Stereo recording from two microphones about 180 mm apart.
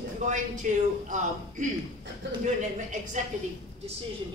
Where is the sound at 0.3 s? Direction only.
45° right (ahead or behind).